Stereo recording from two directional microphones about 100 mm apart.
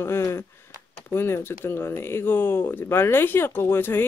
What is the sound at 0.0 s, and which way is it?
Speech, 25° left (ahead or behind).